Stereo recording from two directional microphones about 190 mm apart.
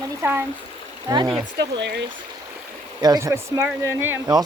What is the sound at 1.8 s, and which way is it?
Speech, 65° right (ahead or behind).